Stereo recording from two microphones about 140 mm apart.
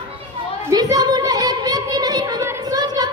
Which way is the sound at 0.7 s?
30° right (ahead or behind).